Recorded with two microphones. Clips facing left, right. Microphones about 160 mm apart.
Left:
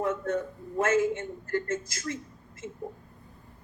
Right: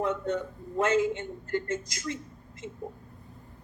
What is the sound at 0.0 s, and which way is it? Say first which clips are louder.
A woman's voice: even; 20° right (ahead or behind).